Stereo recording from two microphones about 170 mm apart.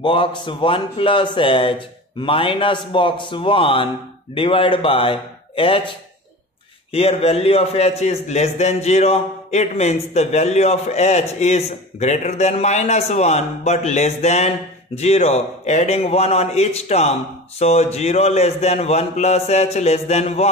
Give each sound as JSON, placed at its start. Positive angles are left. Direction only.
{"t": 0.0, "sound": "a man's voice", "side_deg": 30}